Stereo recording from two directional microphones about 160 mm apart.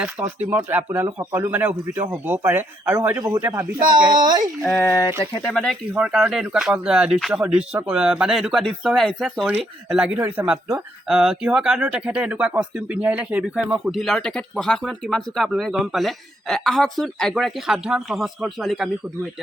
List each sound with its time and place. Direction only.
0.0 s speech: 5° right (ahead or behind); by 4.4 s 25° right (ahead or behind)
4.6 s speech: 5° left (ahead or behind)
4.9 s speech: 25° left (ahead or behind)
5.4 s speech: 5° left (ahead or behind)